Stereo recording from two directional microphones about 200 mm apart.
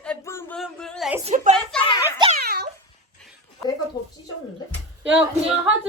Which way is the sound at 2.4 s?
55° right (ahead or behind).